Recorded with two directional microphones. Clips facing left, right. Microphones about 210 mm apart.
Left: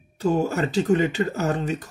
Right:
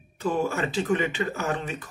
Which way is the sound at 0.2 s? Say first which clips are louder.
Left 4 dB; 40° left (ahead or behind).